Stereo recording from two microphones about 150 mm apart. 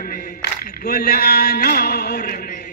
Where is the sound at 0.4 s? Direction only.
90° left.